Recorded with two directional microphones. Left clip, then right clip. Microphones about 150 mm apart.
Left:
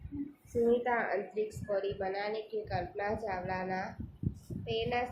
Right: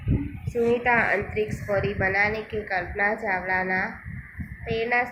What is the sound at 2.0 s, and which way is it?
A woman's voice, 15° right (ahead or behind).